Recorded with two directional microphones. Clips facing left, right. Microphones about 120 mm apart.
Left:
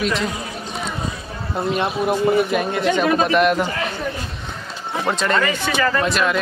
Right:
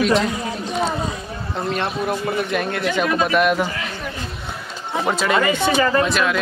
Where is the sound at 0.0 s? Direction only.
Centre (ahead or behind).